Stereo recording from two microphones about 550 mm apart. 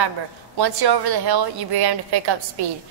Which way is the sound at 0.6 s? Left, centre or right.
Right.